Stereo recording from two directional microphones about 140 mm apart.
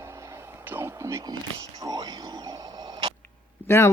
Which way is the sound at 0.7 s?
15° right (ahead or behind).